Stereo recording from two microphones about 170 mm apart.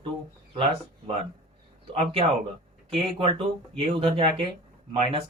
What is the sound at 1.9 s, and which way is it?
Speech, 35° right (ahead or behind).